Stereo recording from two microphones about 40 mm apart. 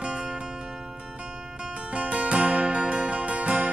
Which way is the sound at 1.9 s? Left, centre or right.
Right.